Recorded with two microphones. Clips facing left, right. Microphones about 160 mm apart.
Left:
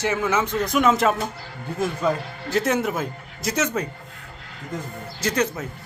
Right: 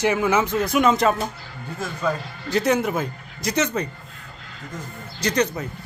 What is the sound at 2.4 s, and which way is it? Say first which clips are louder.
Speech: right 2 dB; centre (ahead or behind).